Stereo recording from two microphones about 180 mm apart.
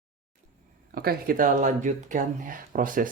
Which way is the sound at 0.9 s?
55° right (ahead or behind).